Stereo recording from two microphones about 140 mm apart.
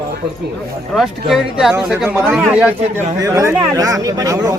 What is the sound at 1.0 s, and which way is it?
Speech, centre (ahead or behind).